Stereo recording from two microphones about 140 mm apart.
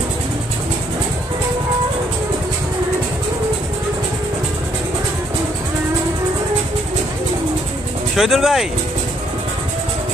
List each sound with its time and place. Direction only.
8.2 s speech: centre (ahead or behind)